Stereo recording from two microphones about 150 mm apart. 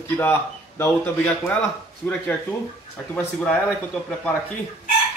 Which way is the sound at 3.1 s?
10° left (ahead or behind).